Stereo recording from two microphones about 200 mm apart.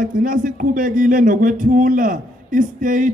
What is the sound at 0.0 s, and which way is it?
Speech, 40° right (ahead or behind).